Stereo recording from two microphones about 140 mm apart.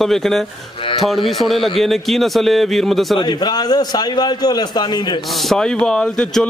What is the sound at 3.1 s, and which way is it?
A man's voice, 30° left (ahead or behind).